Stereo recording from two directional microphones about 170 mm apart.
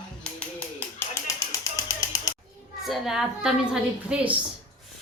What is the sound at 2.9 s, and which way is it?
A woman's voice, centre (ahead or behind).